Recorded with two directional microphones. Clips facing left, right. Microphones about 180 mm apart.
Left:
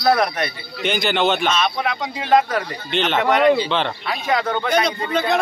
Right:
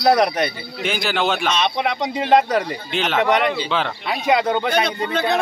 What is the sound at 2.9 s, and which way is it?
A man's voice, 5° right (ahead or behind).